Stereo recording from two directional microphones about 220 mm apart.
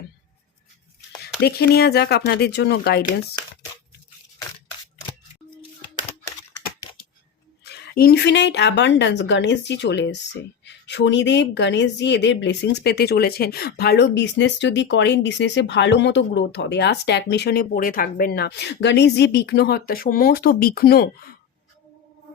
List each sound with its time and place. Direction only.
1.4 s speech: 45° left (ahead or behind)
7.6 s speech: 45° left (ahead or behind)